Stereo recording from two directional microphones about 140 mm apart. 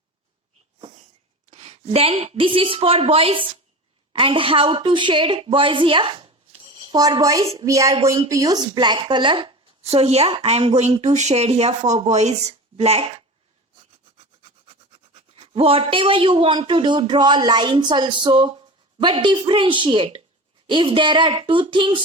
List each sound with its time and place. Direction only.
1.5 s a woman's voice: 50° right (ahead or behind); by 7.4 s 25° right (ahead or behind)
7.6 s a sound: 25° right (ahead or behind)
8.3 s speech: 25° right (ahead or behind); by 13.2 s 50° right (ahead or behind)
14.9 s speech: 45° right (ahead or behind)